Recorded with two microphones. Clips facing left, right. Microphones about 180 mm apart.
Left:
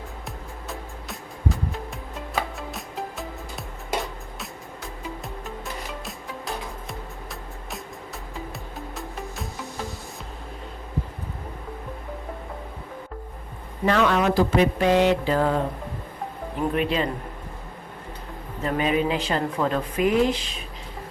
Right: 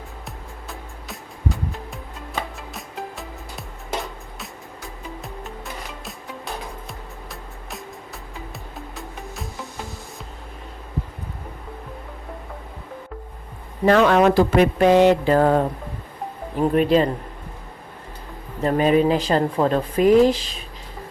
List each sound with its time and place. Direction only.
0.7 s music: centre (ahead or behind)
9.0 s music: centre (ahead or behind)
13.8 s speech: 45° right (ahead or behind)
16.7 s speech: 40° right (ahead or behind)
18.6 s speech: 40° right (ahead or behind)